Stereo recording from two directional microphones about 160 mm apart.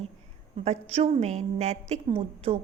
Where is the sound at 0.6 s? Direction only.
40° right (ahead or behind).